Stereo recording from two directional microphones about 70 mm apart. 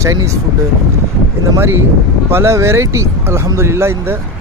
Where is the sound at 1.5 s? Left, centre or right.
Right.